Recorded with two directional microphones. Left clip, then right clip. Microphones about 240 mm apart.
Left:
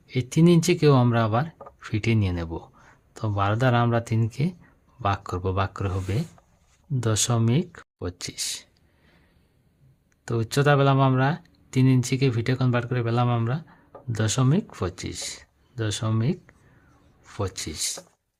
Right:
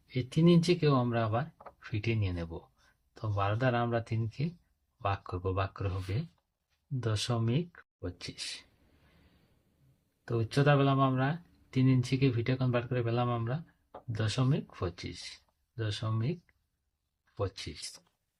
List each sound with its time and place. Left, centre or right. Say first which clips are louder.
0.1 s speech: left 7 dB; left
7.0 s speech: left 9 dB; left
10.2 s speech: left 7 dB; left